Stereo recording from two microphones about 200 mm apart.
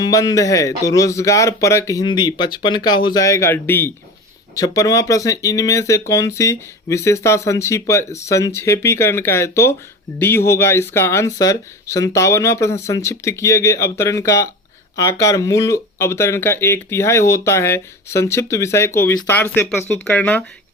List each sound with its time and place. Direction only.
0.0 s speech: 15° left (ahead or behind)